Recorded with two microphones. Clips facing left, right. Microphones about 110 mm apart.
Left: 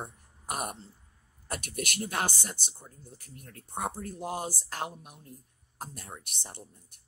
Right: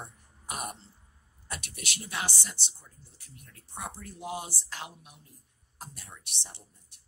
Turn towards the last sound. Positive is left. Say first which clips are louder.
# left 5 dB
turn(degrees=50)  # may be behind; listen again after turning